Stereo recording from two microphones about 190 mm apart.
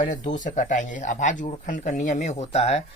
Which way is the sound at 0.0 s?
45° left (ahead or behind).